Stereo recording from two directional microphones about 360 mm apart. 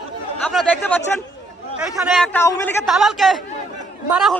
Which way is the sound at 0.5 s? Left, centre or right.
Centre.